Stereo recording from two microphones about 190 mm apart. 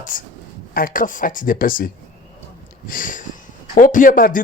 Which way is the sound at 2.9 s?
45° left (ahead or behind).